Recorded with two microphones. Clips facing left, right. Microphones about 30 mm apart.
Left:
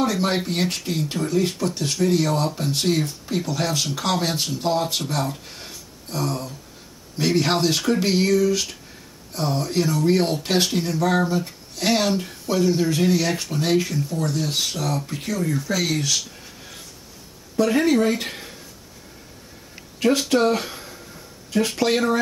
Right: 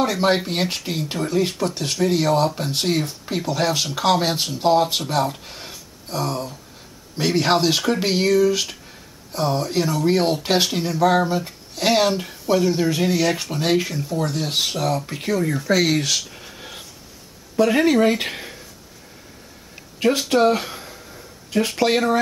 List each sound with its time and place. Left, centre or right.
0.0 s speech: centre
16.3 s a sound: right
17.6 s speech: centre
20.0 s speech: centre